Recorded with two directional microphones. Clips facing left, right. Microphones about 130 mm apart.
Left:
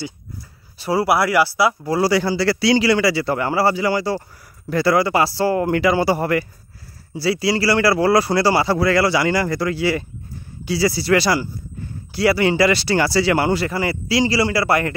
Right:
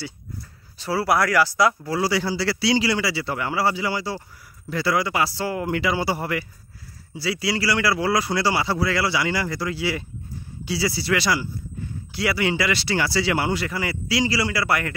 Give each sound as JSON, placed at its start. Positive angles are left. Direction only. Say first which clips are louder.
{"t": 0.7, "sound": "speech", "louder": "left 4 dB", "side_deg": 15}
{"t": 2.0, "sound": "a man's voice", "louder": "left 6 dB", "side_deg": 50}
{"t": 7.2, "sound": "speech", "louder": "left 6 dB", "side_deg": 35}
{"t": 8.7, "sound": "a man's voice", "louder": "left 6 dB", "side_deg": 50}
{"t": 13.6, "sound": "a man's voice", "louder": "left 5 dB", "side_deg": 35}